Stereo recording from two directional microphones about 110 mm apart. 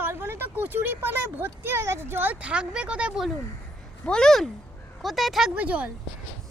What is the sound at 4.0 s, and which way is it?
Speech, 5° left (ahead or behind).